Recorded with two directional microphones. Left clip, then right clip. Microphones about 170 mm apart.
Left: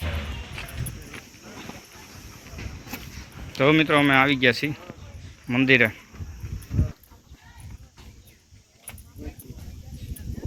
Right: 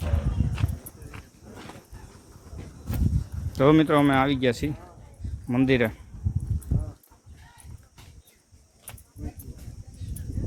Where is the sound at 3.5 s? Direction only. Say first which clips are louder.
Left 1 dB; 30° right (ahead or behind).